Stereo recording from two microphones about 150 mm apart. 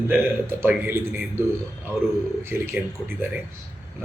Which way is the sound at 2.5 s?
15° right (ahead or behind).